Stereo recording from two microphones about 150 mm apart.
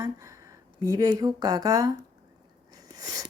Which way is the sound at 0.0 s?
20° right (ahead or behind).